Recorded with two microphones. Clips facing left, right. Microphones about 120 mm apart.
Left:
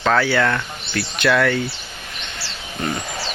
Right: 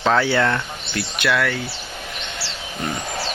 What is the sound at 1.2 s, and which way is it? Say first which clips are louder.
Speech: left 4 dB; 5° right (ahead or behind).